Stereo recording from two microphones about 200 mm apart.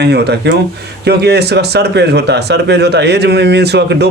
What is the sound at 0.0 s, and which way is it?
Speech, 55° right (ahead or behind).